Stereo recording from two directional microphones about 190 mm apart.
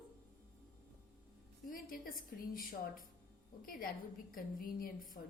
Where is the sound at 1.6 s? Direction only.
50° left (ahead or behind).